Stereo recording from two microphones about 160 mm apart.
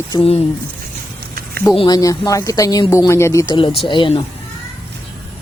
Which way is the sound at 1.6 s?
25° left (ahead or behind).